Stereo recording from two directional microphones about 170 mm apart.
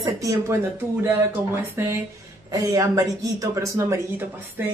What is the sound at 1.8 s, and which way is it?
Speech, 15° right (ahead or behind).